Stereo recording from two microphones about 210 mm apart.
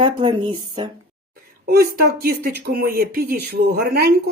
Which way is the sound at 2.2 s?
45° right (ahead or behind).